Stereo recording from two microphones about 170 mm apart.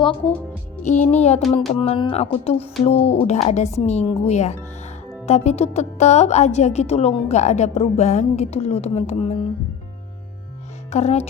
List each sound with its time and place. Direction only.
0.8 s speech: 45° left (ahead or behind)
10.9 s speech: 40° left (ahead or behind)